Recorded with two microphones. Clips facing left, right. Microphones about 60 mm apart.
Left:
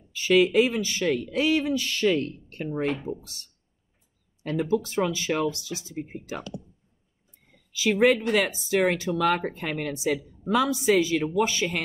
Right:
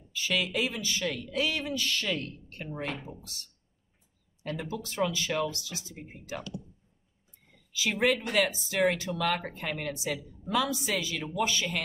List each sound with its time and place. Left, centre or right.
0.1 s speech: left
4.4 s speech: left
7.7 s speech: left
9.9 s speech: left